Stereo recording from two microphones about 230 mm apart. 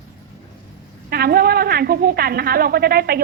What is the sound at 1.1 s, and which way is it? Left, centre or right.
A woman's voice, right.